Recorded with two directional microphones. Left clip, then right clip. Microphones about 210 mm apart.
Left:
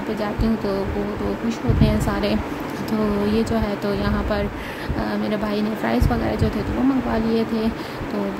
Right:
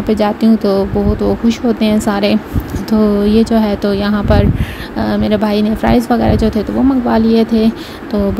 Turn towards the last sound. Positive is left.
turn(degrees=-30)  # may be behind; listen again after turning